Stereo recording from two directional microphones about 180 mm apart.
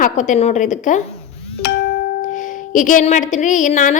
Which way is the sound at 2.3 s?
45° left (ahead or behind).